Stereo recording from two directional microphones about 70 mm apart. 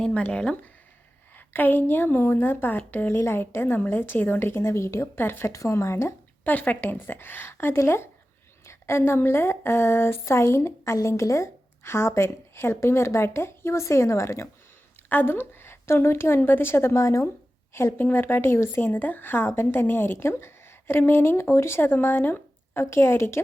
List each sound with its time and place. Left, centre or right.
0.0 s speech: centre
1.4 s speech: left
5.1 s speech: left
5.5 s speech: left
6.4 s a woman's voice: left
15.1 s speech: left